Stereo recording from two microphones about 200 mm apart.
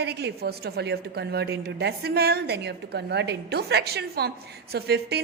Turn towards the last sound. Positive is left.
turn(degrees=-55)  # may be behind; listen again after turning